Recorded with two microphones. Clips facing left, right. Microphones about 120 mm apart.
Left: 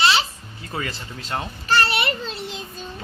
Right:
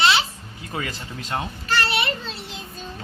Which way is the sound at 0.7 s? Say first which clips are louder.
Even; 10° right (ahead or behind).